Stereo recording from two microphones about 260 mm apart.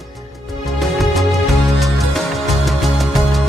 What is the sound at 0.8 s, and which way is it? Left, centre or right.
Music, centre.